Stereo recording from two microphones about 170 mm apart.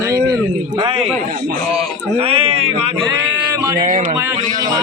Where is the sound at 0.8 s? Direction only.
35° right (ahead or behind).